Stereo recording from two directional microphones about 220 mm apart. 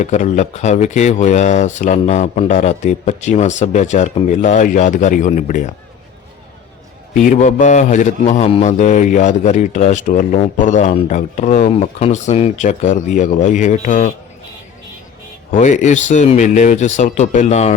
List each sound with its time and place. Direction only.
0.0 s a man's voice: 30° left (ahead or behind)
7.2 s a man's voice: 35° left (ahead or behind)
15.5 s a man's voice: 35° left (ahead or behind)